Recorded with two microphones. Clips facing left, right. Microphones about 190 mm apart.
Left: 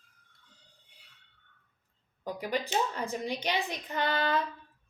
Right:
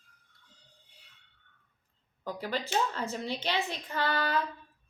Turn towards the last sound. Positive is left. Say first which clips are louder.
# left 1 dB
turn(degrees=20)  # may be behind; listen again after turning